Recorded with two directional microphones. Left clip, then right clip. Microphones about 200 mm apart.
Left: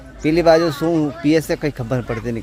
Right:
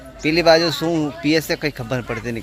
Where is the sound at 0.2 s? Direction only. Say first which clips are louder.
Left 1 dB; 15° left (ahead or behind).